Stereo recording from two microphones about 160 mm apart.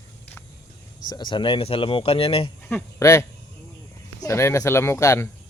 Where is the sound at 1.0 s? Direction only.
30° left (ahead or behind).